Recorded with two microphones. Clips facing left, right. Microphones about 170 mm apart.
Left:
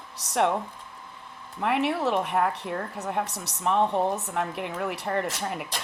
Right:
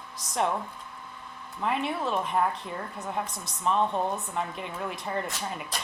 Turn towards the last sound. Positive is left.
turn(degrees=65)  # may be behind; listen again after turning